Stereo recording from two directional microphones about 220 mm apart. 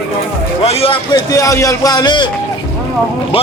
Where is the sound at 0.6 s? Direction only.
25° left (ahead or behind).